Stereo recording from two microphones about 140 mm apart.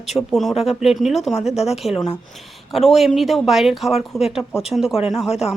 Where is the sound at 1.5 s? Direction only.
50° left (ahead or behind).